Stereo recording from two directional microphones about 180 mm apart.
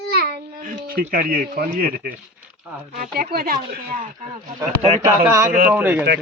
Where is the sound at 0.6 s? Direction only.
50° right (ahead or behind).